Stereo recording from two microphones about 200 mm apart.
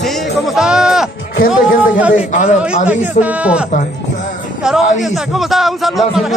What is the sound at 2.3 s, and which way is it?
Speech, 35° left (ahead or behind).